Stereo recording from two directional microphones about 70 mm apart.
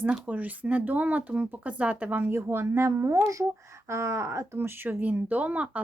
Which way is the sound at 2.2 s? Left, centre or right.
Right.